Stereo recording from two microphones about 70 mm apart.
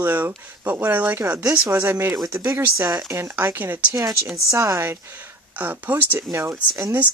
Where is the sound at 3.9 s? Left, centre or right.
Right.